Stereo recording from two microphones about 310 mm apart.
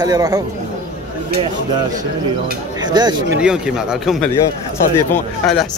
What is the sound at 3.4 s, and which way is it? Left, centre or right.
A man's voice, centre.